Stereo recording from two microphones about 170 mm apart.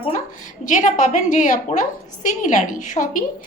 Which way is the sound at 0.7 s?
45° left (ahead or behind).